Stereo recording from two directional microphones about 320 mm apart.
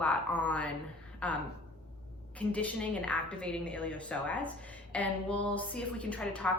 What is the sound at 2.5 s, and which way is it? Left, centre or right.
A woman's voice, centre.